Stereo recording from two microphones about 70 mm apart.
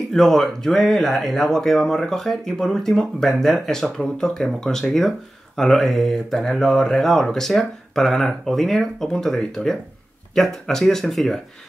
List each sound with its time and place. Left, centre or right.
0.1 s speech: centre